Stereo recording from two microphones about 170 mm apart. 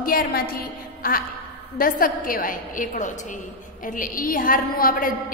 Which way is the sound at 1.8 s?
55° left (ahead or behind).